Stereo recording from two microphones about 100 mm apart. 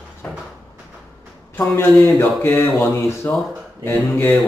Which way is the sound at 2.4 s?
20° left (ahead or behind).